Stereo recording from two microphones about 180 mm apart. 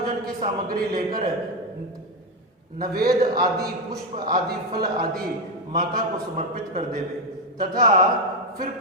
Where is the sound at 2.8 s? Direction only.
55° right (ahead or behind).